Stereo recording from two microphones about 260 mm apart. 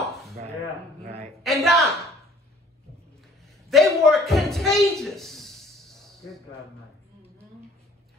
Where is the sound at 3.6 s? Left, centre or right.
Centre.